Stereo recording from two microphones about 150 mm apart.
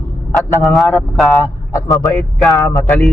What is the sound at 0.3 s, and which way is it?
Speech, centre (ahead or behind).